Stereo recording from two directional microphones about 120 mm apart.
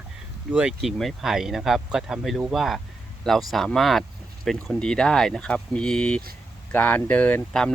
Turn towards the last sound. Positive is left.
turn(degrees=10)  # may be behind; listen again after turning